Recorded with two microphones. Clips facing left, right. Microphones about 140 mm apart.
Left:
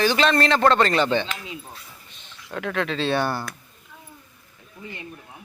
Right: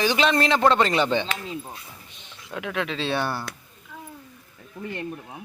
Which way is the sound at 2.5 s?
5° right (ahead or behind).